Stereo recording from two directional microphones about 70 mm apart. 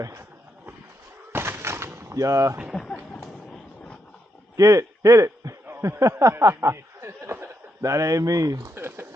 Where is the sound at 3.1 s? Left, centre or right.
Centre.